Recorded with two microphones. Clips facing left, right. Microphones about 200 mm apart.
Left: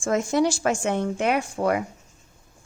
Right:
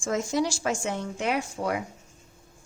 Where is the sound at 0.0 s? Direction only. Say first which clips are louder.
Left 5 dB; 55° left (ahead or behind).